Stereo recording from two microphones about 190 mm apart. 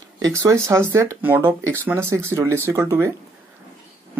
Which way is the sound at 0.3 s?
15° right (ahead or behind).